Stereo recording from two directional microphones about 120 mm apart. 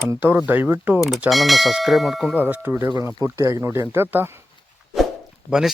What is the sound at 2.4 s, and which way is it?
Speech, 15° right (ahead or behind).